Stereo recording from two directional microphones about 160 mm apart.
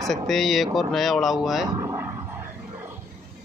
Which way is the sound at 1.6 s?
20° right (ahead or behind).